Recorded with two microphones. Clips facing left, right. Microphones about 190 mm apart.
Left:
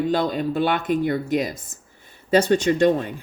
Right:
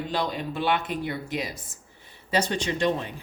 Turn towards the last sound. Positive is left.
turn(degrees=50)  # may be behind; listen again after turning